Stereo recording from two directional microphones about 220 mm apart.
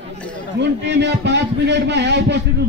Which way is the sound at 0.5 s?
50° right (ahead or behind).